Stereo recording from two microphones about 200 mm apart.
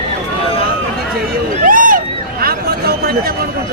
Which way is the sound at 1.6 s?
45° right (ahead or behind).